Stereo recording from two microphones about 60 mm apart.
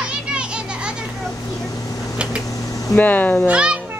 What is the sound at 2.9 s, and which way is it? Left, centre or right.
Speech, left.